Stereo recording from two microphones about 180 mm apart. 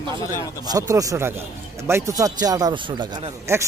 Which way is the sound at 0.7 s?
20° right (ahead or behind).